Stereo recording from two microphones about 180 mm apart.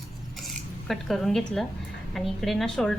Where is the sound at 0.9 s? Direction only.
Centre (ahead or behind).